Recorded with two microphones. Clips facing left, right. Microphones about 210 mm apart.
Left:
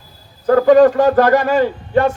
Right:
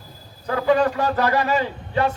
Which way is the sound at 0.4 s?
45° left (ahead or behind).